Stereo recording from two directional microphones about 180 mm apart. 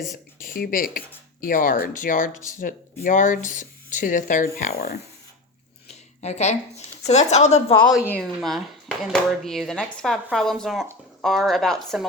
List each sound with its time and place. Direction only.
0.4 s speech: 50° left (ahead or behind)
5.9 s a sound: 40° left (ahead or behind)
7.1 s a woman's voice: 40° left (ahead or behind)
8.4 s speech: centre (ahead or behind)